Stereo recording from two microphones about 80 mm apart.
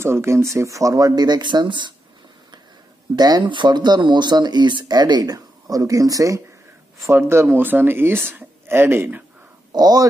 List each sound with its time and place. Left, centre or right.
0.0 s speech: right
3.2 s speech: right
3.4 s speech: right
7.1 s speech: right
9.7 s speech: right